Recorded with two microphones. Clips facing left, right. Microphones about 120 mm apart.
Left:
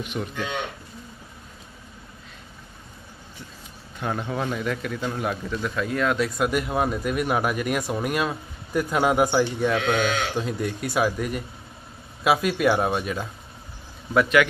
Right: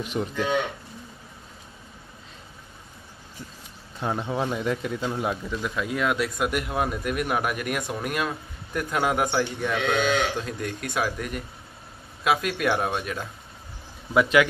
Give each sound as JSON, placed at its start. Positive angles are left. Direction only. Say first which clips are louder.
{"t": 0.0, "sound": "speech", "louder": "right 2 dB", "side_deg": -35}
{"t": 4.0, "sound": "a man's voice", "louder": "even", "side_deg": -20}